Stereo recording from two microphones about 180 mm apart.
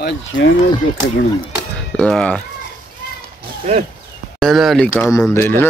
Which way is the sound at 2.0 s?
5° left (ahead or behind).